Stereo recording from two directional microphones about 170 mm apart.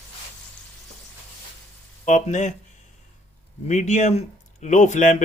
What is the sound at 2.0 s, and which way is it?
Speech, 45° left (ahead or behind).